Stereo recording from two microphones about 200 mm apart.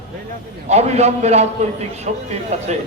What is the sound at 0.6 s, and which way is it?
A man's voice, 35° right (ahead or behind).